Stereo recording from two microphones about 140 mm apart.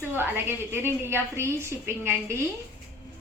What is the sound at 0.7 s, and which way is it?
A woman's voice, 15° right (ahead or behind).